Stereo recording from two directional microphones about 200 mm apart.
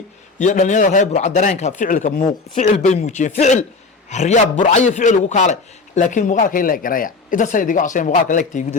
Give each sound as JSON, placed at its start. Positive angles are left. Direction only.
{"t": 0.3, "sound": "a man's voice", "side_deg": 40}